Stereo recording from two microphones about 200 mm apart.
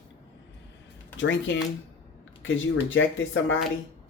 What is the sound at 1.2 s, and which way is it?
Speech, 65° left (ahead or behind).